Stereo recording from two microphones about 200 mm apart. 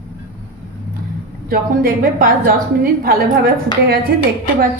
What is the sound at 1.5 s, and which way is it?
A woman's voice, 45° right (ahead or behind).